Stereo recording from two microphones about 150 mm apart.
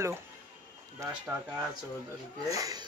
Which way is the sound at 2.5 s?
25° right (ahead or behind).